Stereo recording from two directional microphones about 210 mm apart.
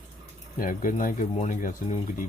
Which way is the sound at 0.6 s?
40° left (ahead or behind).